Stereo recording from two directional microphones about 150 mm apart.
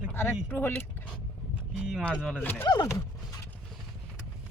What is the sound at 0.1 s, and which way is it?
Speech, 15° left (ahead or behind).